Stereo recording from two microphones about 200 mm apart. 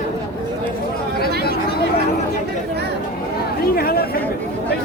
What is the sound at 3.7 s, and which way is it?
Speech, 50° left (ahead or behind).